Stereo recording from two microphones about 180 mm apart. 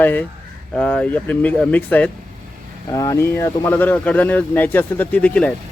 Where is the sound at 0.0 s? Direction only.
10° left (ahead or behind).